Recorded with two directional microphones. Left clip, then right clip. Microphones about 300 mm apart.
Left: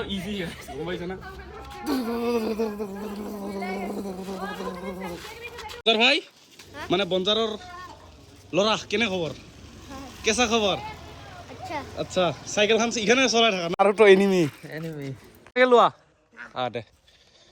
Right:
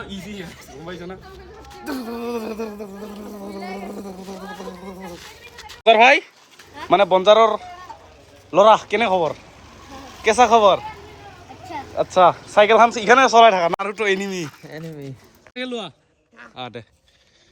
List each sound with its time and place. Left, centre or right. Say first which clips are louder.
0.9 s speech: right 1 dB; centre
1.9 s a sound: left 1 dB; centre
3.2 s speech: even; centre
4.7 s a sound: left 2 dB; centre
5.0 s speech: left 1 dB; centre
9.8 s a sound: right 6 dB; centre
11.9 s speech: right 11 dB; centre
13.7 s speech: left 5 dB; centre
14.6 s speech: right 1 dB; right
15.5 s speech: left 12 dB; centre